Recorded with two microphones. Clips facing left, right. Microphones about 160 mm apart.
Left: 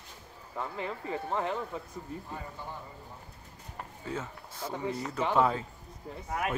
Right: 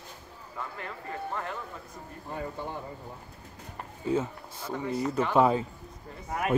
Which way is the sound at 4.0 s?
20° right (ahead or behind).